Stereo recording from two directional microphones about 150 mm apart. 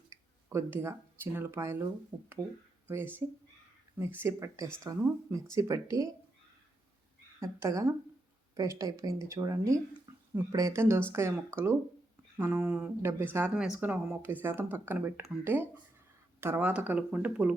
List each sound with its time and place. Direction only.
0.1 s a woman's voice: 15° right (ahead or behind)
7.3 s a woman's voice: 20° right (ahead or behind)